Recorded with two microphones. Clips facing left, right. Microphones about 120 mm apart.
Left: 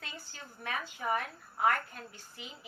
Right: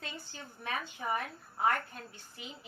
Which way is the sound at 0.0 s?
25° right (ahead or behind).